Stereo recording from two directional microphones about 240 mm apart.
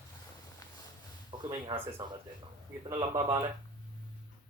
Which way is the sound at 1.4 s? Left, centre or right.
Centre.